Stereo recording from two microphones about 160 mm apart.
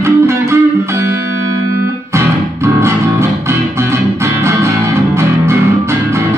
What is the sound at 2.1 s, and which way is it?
Music, 20° right (ahead or behind).